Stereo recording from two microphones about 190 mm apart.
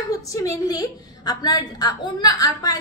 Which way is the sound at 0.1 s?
15° left (ahead or behind).